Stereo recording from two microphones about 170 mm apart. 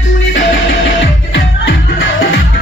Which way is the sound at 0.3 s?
90° left.